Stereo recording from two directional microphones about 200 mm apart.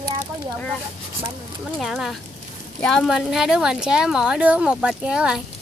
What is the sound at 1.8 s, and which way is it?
A woman's voice, centre (ahead or behind).